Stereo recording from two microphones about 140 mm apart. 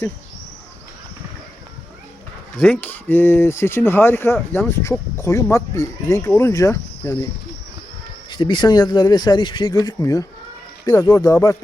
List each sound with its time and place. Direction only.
2.6 s speech: 10° left (ahead or behind)
8.3 s speech: 35° left (ahead or behind)